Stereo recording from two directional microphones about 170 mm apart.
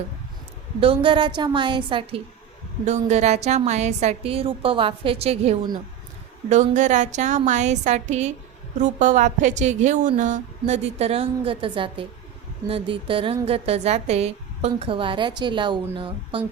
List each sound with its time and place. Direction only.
0.8 s a woman's voice: 30° right (ahead or behind)
2.8 s a woman's voice: 40° right (ahead or behind)